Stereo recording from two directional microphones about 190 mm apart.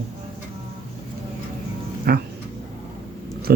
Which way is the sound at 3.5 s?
55° right (ahead or behind).